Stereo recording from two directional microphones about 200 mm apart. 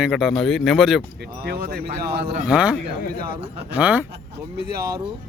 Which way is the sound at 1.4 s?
50° right (ahead or behind).